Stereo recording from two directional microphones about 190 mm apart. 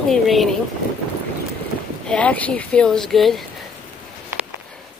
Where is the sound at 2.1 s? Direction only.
5° left (ahead or behind).